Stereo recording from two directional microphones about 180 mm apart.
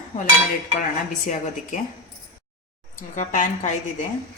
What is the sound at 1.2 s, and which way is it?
Speech, 45° left (ahead or behind).